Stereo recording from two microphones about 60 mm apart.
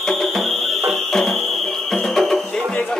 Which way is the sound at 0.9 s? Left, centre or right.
Centre.